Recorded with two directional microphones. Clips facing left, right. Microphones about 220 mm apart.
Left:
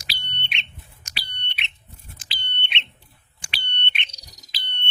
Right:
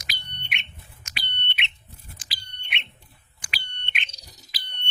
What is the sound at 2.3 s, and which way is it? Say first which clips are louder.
Smoke detector: left 3 dB; 25° left (ahead or behind).